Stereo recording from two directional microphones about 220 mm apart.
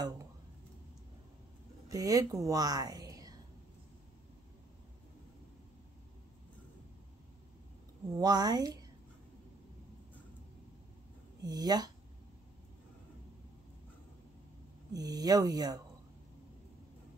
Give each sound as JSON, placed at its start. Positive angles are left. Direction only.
{"t": 1.9, "sound": "a woman's voice", "side_deg": -15}
{"t": 8.1, "sound": "speech", "side_deg": -20}
{"t": 11.4, "sound": "speech", "side_deg": -20}
{"t": 14.9, "sound": "speech", "side_deg": -15}